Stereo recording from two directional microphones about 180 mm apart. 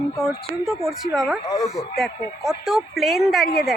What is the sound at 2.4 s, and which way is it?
Speech, centre (ahead or behind).